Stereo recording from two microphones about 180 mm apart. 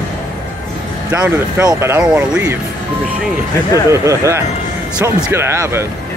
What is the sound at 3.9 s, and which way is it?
Speech, 15° right (ahead or behind).